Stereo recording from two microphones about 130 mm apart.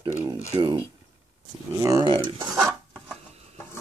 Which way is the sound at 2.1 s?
40° right (ahead or behind).